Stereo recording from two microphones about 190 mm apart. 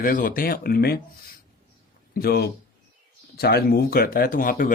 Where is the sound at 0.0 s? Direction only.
45° left (ahead or behind).